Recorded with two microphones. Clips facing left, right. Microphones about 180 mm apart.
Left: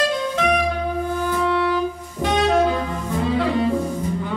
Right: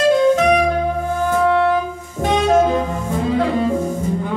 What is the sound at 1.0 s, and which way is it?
Music, 45° right (ahead or behind).